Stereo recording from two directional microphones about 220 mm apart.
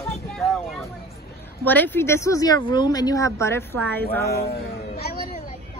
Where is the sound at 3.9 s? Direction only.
45° left (ahead or behind).